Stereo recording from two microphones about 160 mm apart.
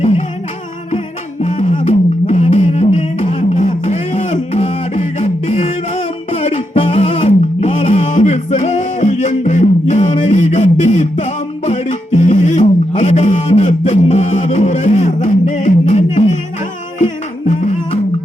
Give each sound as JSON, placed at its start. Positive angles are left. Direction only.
{"t": 0.9, "sound": "music", "side_deg": 45}
{"t": 4.9, "sound": "beatboxing", "side_deg": 50}
{"t": 6.3, "sound": "music", "side_deg": 40}
{"t": 8.0, "sound": "music", "side_deg": 50}
{"t": 17.5, "sound": "music", "side_deg": 50}